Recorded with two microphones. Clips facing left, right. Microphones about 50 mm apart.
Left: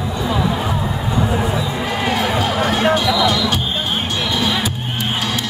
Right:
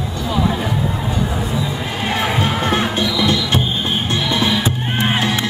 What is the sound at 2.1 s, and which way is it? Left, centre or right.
Music, right.